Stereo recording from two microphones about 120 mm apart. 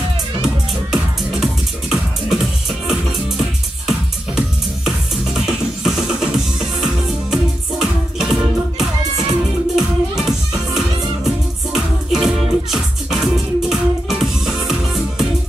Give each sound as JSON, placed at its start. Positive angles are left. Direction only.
{"t": 0.9, "sound": "music", "side_deg": -5}
{"t": 5.4, "sound": "music", "side_deg": -5}